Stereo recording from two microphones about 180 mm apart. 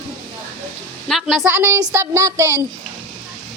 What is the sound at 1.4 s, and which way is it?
Speech, 15° right (ahead or behind).